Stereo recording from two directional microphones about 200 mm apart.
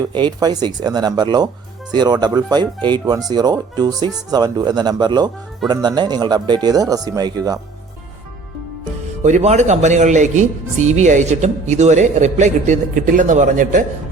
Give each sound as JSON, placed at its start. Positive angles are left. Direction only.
{"t": 0.1, "sound": "speech", "side_deg": -20}
{"t": 9.2, "sound": "speech", "side_deg": -35}